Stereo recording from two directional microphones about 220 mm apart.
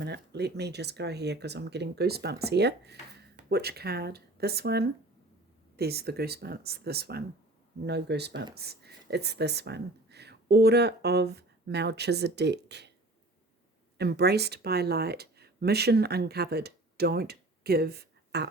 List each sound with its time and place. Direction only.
0.0 s speech: 50° right (ahead or behind)
14.0 s speech: 50° right (ahead or behind)